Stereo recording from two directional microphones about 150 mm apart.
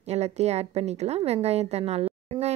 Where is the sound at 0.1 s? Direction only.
45° right (ahead or behind).